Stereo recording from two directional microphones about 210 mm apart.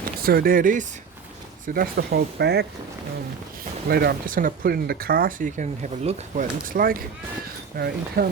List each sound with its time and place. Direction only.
0.2 s speech: 45° right (ahead or behind)
3.8 s speech: 50° right (ahead or behind)